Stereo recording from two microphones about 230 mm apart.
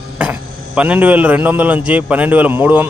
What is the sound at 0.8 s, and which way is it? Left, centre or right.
A man's voice, centre.